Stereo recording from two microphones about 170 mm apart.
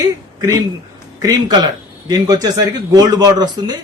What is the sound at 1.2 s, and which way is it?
Speech, 20° right (ahead or behind).